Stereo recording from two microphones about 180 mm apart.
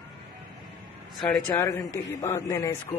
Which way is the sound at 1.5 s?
15° left (ahead or behind).